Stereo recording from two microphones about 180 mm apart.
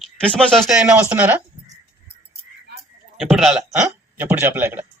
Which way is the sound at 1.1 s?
10° right (ahead or behind).